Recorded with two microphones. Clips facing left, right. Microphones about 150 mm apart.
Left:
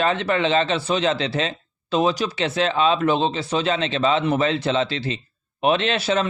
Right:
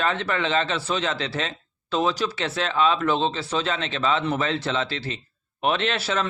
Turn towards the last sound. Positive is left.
turn(degrees=20)  # may be behind; listen again after turning